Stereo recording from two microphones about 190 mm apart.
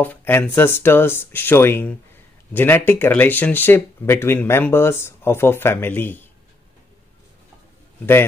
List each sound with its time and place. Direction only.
0.0 s speech: 10° left (ahead or behind)